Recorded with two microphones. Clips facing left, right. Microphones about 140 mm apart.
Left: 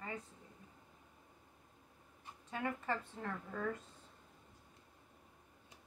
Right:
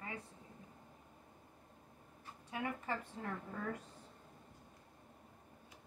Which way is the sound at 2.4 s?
15° right (ahead or behind).